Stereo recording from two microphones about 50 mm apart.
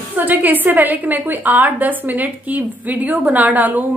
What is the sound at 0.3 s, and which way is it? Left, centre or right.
A woman's voice, right.